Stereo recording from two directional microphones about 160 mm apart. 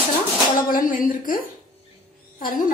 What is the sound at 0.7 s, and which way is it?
A woman's voice, 60° left (ahead or behind).